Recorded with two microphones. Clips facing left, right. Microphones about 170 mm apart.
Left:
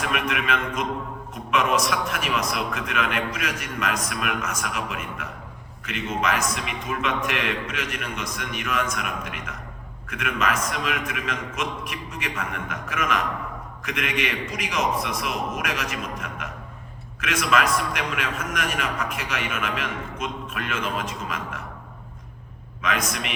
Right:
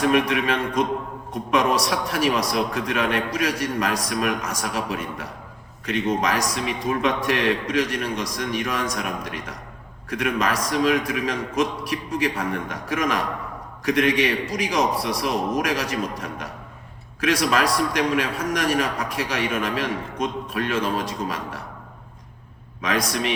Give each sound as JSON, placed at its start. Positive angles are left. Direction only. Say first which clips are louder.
{"t": 0.0, "sound": "a man's voice", "louder": "right 7 dB", "side_deg": -35}
{"t": 22.8, "sound": "a man's voice", "louder": "right 3 dB", "side_deg": -35}